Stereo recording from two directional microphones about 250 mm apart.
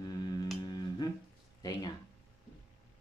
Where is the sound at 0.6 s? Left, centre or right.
Centre.